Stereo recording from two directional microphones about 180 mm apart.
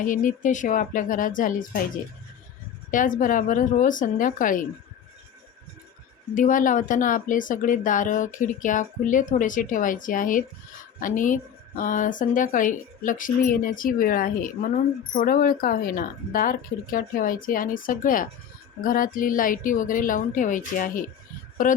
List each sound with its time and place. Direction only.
0.0 s speech: 45° left (ahead or behind)
2.9 s speech: 45° left (ahead or behind)
6.3 s speech: 45° left (ahead or behind)